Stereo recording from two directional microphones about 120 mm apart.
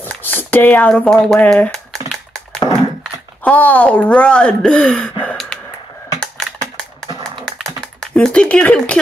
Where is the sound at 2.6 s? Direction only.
35° left (ahead or behind).